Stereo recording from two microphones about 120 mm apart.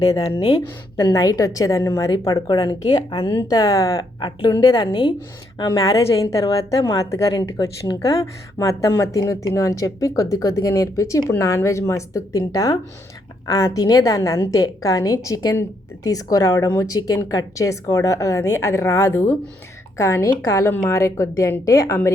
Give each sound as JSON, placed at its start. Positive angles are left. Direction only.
{"t": 0.0, "sound": "a woman's voice", "side_deg": 30}
{"t": 4.2, "sound": "a woman's voice", "side_deg": 40}
{"t": 5.5, "sound": "a woman's voice", "side_deg": 45}
{"t": 6.8, "sound": "a woman's voice", "side_deg": 30}